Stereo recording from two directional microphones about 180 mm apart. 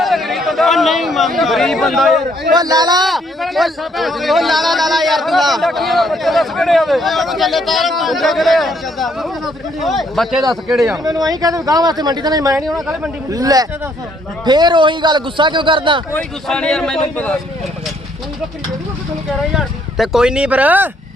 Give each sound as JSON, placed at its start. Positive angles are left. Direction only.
{"t": 0.0, "sound": "a sound", "side_deg": 0}
{"t": 1.4, "sound": "speech", "side_deg": 0}
{"t": 2.6, "sound": "speech", "side_deg": -20}
{"t": 3.0, "sound": "speech", "side_deg": 0}
{"t": 11.0, "sound": "speech", "side_deg": -20}
{"t": 12.6, "sound": "speech", "side_deg": 0}
{"t": 13.3, "sound": "speech", "side_deg": -20}
{"t": 16.1, "sound": "speech", "side_deg": 5}
{"t": 19.5, "sound": "speech", "side_deg": 0}